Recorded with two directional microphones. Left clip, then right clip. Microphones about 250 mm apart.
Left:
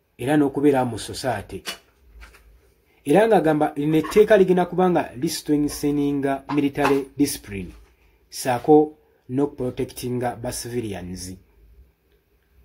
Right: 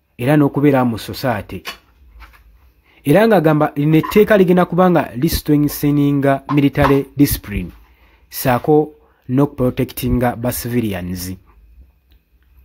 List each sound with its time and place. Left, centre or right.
0.1 s speech: right
3.0 s speech: right